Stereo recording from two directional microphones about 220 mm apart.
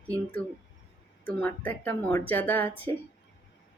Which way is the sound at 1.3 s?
10° left (ahead or behind).